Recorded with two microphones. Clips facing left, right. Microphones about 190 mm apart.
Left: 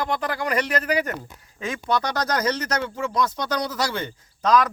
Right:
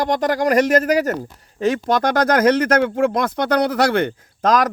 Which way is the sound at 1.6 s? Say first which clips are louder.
Right 7 dB; 80° right.